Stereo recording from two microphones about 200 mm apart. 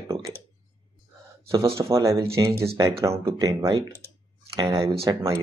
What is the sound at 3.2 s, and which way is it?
Speech, 25° right (ahead or behind).